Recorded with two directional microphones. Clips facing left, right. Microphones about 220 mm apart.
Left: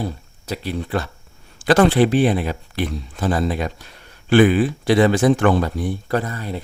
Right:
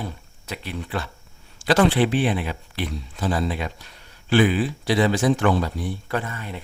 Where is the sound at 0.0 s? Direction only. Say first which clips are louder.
Left 6 dB; 35° left (ahead or behind).